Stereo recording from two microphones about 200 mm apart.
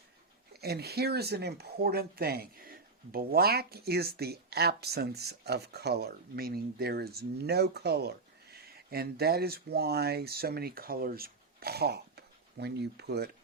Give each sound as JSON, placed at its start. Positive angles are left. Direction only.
{"t": 0.5, "sound": "speech", "side_deg": -55}